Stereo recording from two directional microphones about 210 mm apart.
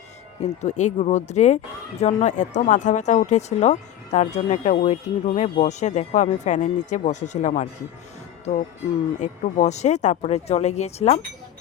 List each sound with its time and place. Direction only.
0.6 s speech: 35° left (ahead or behind)
9.2 s speech: 35° left (ahead or behind)